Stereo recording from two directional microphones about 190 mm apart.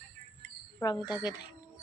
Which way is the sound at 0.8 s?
20° left (ahead or behind).